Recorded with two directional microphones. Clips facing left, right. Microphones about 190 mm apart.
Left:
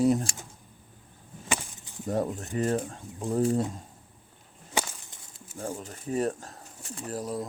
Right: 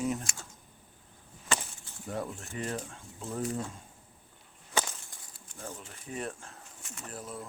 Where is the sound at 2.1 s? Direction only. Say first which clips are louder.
Left 8 dB; 40° left (ahead or behind).